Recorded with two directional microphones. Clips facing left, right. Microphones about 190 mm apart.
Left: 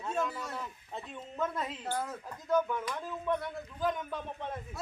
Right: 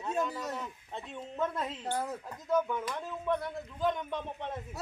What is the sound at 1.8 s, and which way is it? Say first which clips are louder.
Speech: right 2 dB; 15° right (ahead or behind).